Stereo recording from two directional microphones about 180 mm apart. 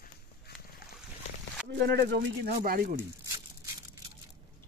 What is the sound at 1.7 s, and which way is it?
Speech, 65° right (ahead or behind).